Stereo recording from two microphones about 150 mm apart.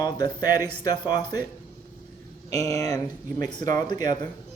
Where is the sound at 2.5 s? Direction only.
25° left (ahead or behind).